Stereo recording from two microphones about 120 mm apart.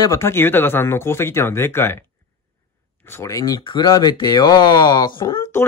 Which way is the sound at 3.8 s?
30° left (ahead or behind).